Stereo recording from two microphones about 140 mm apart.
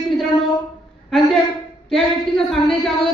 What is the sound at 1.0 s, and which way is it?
Speech, centre (ahead or behind).